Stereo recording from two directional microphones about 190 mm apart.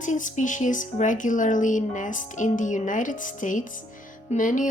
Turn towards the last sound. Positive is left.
turn(degrees=45)  # may be behind; listen again after turning